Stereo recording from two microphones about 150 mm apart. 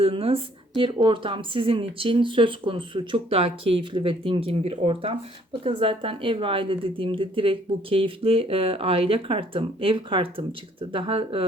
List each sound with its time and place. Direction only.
0.0 s a woman's voice: 40° right (ahead or behind)